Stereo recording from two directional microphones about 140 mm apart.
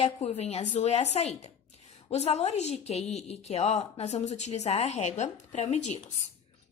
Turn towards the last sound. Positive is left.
turn(degrees=55)  # may be behind; listen again after turning